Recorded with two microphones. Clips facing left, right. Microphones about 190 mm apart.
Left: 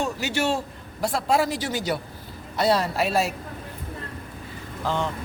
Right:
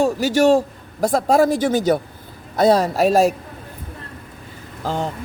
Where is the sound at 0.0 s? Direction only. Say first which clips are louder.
Right 10 dB; 45° right (ahead or behind).